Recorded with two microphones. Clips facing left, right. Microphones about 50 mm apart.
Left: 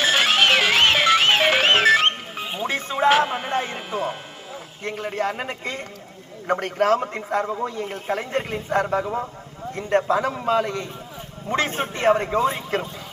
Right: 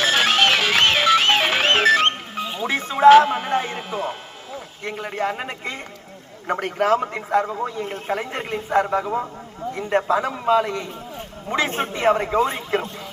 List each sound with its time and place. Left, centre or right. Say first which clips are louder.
0.0 s music: right 1 dB; centre
2.4 s music: right 2 dB; centre
2.6 s music: right 7 dB; centre
4.8 s a man's voice: even; centre
7.4 s a man's voice: even; centre